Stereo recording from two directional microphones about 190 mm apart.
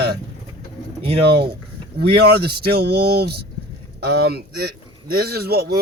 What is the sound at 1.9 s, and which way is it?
Speech, 55° right (ahead or behind).